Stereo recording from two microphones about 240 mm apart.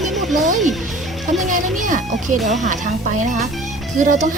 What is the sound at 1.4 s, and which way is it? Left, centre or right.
Speech, right.